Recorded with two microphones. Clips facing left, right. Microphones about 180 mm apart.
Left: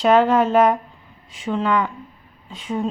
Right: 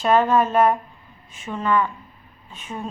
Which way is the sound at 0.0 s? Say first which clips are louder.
Left 3 dB; 90° left.